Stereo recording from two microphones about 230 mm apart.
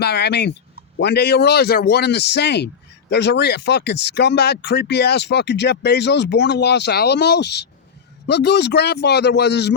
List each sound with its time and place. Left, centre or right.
0.0 s speech: left